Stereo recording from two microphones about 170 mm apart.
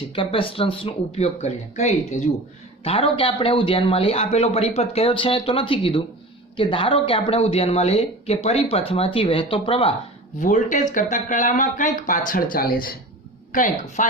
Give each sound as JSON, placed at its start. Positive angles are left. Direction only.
{"t": 0.2, "sound": "speech", "side_deg": 30}
{"t": 2.8, "sound": "speech", "side_deg": 30}
{"t": 10.4, "sound": "speech", "side_deg": 50}
{"t": 13.5, "sound": "speech", "side_deg": 50}